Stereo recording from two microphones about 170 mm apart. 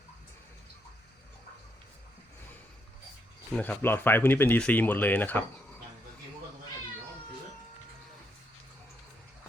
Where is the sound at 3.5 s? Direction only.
10° left (ahead or behind).